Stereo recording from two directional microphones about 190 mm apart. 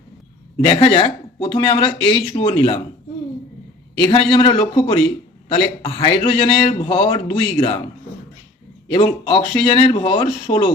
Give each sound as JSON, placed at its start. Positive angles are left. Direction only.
{"t": 0.6, "sound": "a man's voice", "side_deg": 25}
{"t": 4.0, "sound": "a man's voice", "side_deg": 25}
{"t": 8.9, "sound": "a man's voice", "side_deg": 25}